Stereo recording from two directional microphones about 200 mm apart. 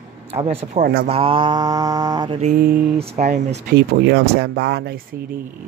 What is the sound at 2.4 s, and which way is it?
Speech, 45° right (ahead or behind).